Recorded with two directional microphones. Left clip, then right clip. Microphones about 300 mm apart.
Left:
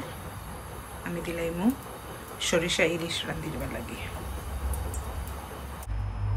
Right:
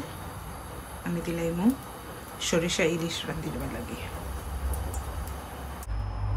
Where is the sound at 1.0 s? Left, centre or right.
Centre.